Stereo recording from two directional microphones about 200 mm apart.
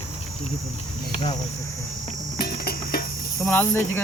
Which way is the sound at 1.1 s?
30° left (ahead or behind).